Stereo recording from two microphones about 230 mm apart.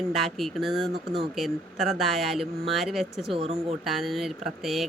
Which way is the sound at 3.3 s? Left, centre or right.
Right.